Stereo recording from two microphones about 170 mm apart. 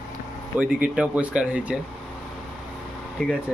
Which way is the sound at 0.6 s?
5° right (ahead or behind).